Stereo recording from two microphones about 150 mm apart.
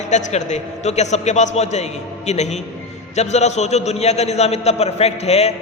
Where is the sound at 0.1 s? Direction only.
50° left (ahead or behind).